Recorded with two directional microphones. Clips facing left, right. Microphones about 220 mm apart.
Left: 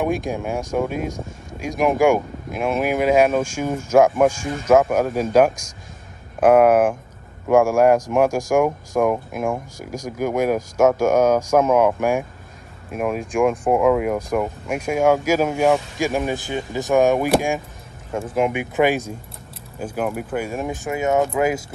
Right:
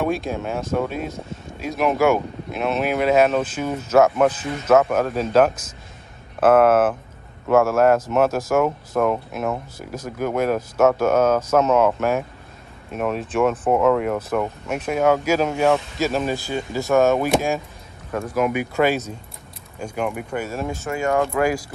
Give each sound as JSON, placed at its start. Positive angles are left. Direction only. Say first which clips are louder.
{"t": 0.0, "sound": "speech", "louder": "left 1 dB", "side_deg": 15}
{"t": 18.3, "sound": "speech", "louder": "left 1 dB", "side_deg": 25}
{"t": 19.8, "sound": "speech", "louder": "left 1 dB", "side_deg": 5}
{"t": 20.4, "sound": "speech", "louder": "left 1 dB", "side_deg": 15}